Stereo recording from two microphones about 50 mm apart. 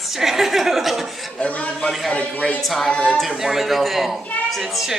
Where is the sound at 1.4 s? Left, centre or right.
Left.